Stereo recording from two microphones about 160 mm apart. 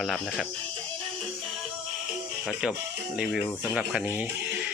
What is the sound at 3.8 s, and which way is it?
Speech, 10° right (ahead or behind).